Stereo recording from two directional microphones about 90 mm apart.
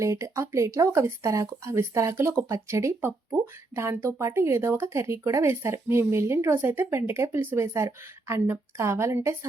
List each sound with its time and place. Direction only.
0.0 s speech: 35° right (ahead or behind)